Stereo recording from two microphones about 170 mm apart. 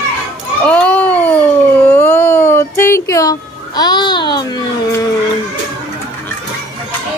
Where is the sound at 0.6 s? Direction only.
10° left (ahead or behind); by 5.0 s 25° left (ahead or behind).